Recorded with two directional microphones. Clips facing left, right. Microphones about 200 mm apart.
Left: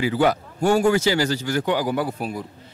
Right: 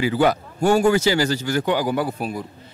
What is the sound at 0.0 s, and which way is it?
Speech, 10° right (ahead or behind).